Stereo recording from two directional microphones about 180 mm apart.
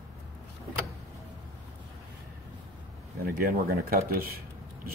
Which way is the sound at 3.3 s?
55° right (ahead or behind).